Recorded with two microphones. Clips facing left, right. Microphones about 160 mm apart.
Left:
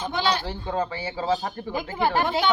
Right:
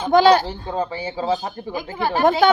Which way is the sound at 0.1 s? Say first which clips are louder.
Right 14 dB; 40° right (ahead or behind).